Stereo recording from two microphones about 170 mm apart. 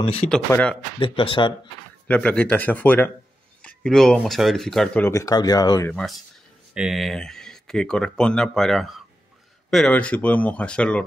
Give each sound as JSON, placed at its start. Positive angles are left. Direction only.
{"t": 0.1, "sound": "speech", "side_deg": 5}
{"t": 0.9, "sound": "speech", "side_deg": 30}
{"t": 2.0, "sound": "speech", "side_deg": 10}
{"t": 5.0, "sound": "speech", "side_deg": 20}
{"t": 6.7, "sound": "speech", "side_deg": -5}